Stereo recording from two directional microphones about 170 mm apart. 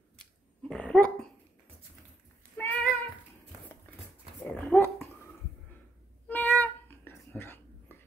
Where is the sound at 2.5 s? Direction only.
10° left (ahead or behind).